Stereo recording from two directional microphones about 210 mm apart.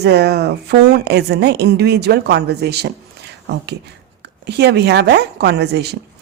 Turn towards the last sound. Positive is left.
turn(degrees=-50)  # may be behind; listen again after turning